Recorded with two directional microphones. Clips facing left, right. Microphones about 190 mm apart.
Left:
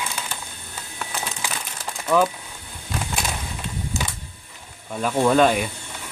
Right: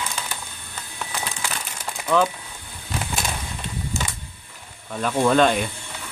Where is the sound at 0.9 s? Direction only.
5° left (ahead or behind).